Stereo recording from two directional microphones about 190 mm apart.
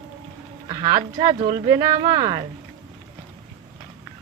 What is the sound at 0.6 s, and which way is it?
Speech, 20° right (ahead or behind).